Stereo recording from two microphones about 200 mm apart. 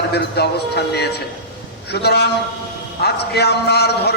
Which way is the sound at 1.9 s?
55° left (ahead or behind).